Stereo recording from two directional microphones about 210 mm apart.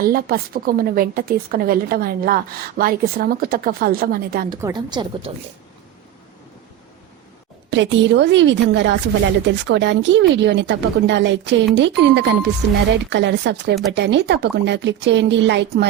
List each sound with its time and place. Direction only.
0.0 s a woman's voice: 45° right (ahead or behind)
4.4 s a woman's voice: 20° right (ahead or behind)
7.7 s speech: 60° right (ahead or behind)